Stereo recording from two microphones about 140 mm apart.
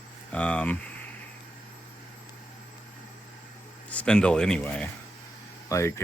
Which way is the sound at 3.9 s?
10° left (ahead or behind).